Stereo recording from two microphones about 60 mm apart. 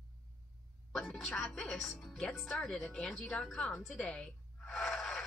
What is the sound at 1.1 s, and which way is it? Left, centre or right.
Speech, centre.